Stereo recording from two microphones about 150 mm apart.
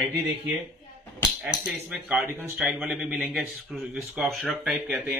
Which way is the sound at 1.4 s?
5° right (ahead or behind).